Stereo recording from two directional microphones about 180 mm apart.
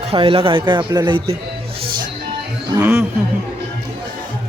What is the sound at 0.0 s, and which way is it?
A man's voice, 30° right (ahead or behind).